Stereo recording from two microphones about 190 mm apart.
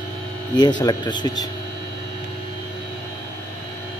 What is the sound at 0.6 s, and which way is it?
Speech, 20° left (ahead or behind).